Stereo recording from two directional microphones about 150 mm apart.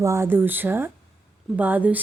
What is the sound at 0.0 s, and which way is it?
Speech, 15° right (ahead or behind).